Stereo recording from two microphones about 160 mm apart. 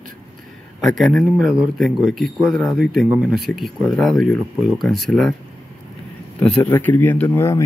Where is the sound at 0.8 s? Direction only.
Centre (ahead or behind).